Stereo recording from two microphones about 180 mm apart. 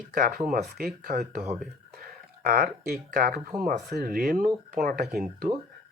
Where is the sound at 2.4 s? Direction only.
55° right (ahead or behind).